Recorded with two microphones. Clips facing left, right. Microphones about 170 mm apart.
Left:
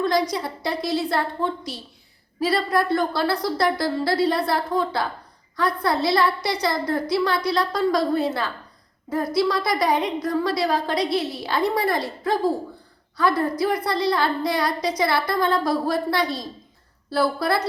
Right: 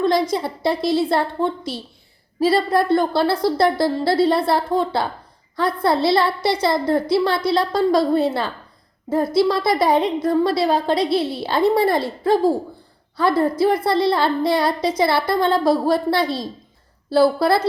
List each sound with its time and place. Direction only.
0.0 s a woman's voice: 25° right (ahead or behind)